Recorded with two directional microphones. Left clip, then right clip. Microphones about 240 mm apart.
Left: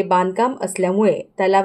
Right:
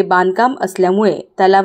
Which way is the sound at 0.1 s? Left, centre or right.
Right.